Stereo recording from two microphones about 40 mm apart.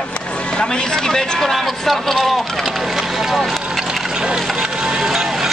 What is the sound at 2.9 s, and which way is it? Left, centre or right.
Run, centre.